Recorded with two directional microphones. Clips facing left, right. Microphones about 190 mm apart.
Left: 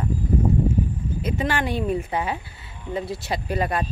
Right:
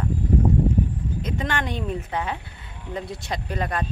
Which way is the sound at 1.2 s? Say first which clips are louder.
Left 4 dB; 5° left (ahead or behind).